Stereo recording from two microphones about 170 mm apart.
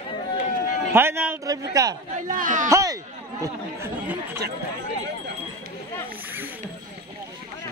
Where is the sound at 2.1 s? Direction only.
50° right (ahead or behind).